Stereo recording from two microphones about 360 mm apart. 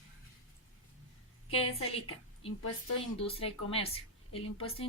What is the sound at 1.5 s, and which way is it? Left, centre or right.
Speech, centre.